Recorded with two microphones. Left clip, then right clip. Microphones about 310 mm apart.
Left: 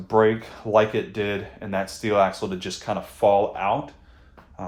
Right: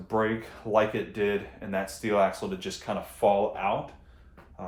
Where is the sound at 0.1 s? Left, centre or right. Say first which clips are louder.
Left 9 dB; left.